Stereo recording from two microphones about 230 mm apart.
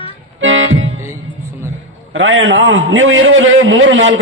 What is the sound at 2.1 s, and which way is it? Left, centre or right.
A man's voice, right.